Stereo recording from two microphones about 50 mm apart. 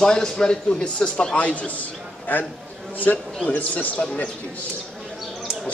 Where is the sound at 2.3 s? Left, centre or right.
Left.